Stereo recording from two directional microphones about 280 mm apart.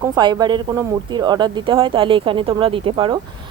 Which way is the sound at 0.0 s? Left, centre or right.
Centre.